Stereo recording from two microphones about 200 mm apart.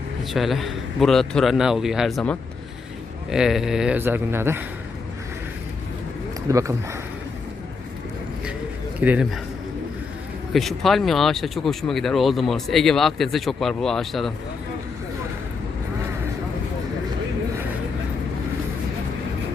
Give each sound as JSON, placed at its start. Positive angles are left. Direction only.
{"t": 0.3, "sound": "speech", "side_deg": 0}
{"t": 6.5, "sound": "speech", "side_deg": -15}
{"t": 9.0, "sound": "speech", "side_deg": -5}
{"t": 10.5, "sound": "speech", "side_deg": 0}